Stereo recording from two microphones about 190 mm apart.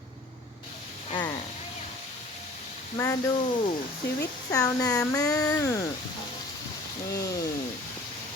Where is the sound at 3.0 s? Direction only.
20° left (ahead or behind).